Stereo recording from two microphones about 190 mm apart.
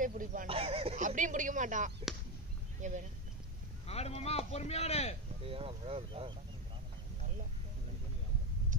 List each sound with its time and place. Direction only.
0.0 s speech: 45° right (ahead or behind)
0.5 s a sound: 30° right (ahead or behind)
2.1 s arrow: centre (ahead or behind)
2.8 s speech: 40° right (ahead or behind)
3.8 s a man's voice: 35° left (ahead or behind)
5.4 s speech: 30° right (ahead or behind)